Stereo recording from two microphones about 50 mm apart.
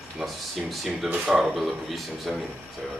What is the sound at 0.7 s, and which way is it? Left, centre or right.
Speech, centre.